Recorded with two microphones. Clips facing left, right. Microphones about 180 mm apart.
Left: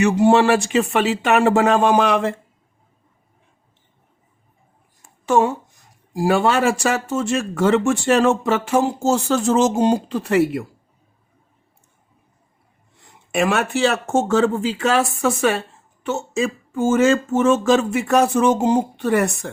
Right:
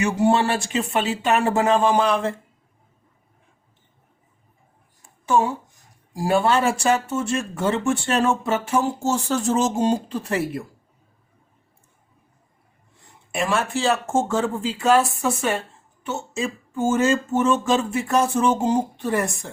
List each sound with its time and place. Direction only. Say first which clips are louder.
0.0 s speech: left 5 dB; 90° left
6.2 s speech: left 2 dB; 90° left
13.3 s speech: left 4 dB; 75° left (ahead or behind)